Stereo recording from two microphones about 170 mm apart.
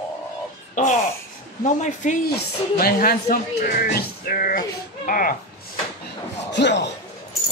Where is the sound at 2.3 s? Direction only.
60° left (ahead or behind).